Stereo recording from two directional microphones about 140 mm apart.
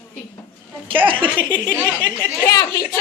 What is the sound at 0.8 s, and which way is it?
Speech, 40° right (ahead or behind).